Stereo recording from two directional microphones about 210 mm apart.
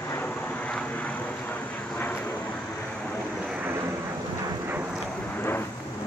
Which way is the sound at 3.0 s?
5° right (ahead or behind).